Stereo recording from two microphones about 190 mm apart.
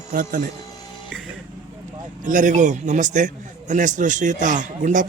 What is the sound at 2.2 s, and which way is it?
A man's voice, 40° right (ahead or behind).